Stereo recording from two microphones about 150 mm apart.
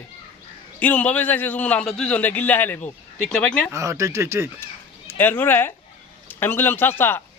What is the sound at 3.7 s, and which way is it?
Speech, 20° right (ahead or behind).